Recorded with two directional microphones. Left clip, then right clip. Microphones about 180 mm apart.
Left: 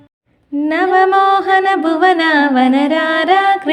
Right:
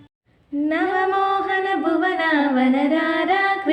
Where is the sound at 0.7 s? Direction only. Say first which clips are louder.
Left 9 dB; 50° left (ahead or behind).